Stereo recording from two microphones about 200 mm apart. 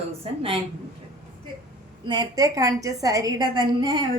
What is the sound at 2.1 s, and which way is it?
A woman's voice, 20° right (ahead or behind).